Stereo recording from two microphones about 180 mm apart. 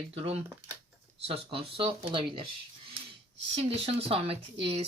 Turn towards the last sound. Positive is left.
turn(degrees=-30)  # may be behind; listen again after turning